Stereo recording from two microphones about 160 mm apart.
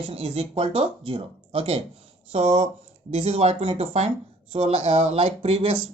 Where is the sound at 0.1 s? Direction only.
40° right (ahead or behind).